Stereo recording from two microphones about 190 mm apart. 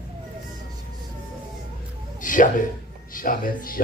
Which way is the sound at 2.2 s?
45° left (ahead or behind).